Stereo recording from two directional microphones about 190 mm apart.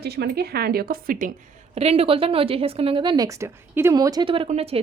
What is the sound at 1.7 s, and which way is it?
A woman's voice, 30° right (ahead or behind).